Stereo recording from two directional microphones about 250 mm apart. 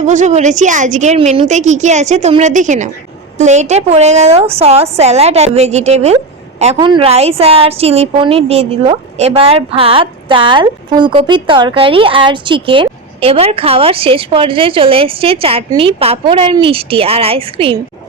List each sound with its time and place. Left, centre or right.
0.1 s a woman's voice: right